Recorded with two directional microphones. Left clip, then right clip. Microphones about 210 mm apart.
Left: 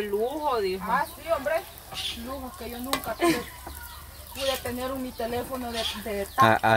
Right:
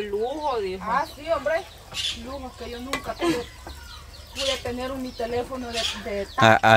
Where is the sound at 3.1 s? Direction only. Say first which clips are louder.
Left 1 dB; 15° left (ahead or behind).